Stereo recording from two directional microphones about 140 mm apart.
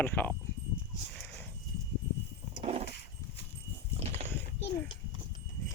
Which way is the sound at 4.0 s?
50° right (ahead or behind).